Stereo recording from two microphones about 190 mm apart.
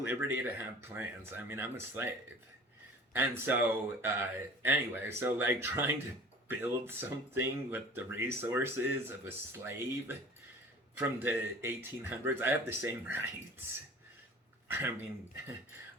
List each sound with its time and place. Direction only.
0.0 s speech: 10° right (ahead or behind)
3.1 s speech: 10° right (ahead or behind)
14.7 s speech: 10° right (ahead or behind)